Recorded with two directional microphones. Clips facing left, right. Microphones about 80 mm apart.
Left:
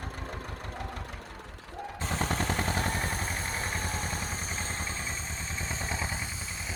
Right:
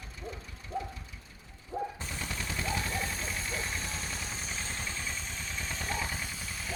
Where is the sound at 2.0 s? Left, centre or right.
Left.